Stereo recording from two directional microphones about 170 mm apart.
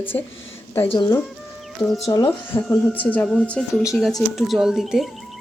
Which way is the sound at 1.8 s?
Centre (ahead or behind).